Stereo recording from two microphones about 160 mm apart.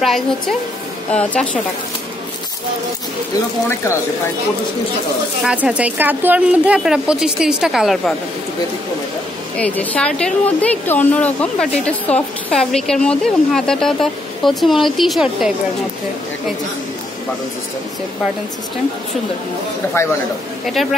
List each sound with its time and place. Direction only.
0.0 s a woman's voice: centre (ahead or behind)
3.6 s speech: 15° left (ahead or behind)
5.4 s a woman's voice: 10° right (ahead or behind)
9.6 s a woman's voice: 10° left (ahead or behind)